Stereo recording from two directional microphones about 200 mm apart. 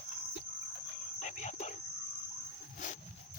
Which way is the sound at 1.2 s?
35° left (ahead or behind).